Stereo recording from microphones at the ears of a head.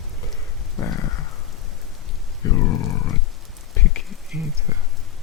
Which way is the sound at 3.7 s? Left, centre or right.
Left.